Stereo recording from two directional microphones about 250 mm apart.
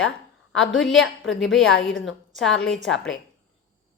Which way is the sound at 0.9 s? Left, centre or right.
Left.